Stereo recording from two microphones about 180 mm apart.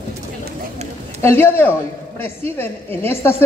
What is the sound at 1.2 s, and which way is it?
A woman's voice, 10° left (ahead or behind).